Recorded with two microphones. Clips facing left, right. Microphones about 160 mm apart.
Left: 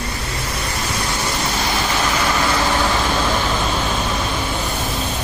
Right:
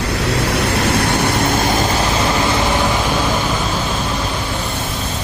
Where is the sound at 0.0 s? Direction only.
85° right; by 1.9 s 45° right (ahead or behind).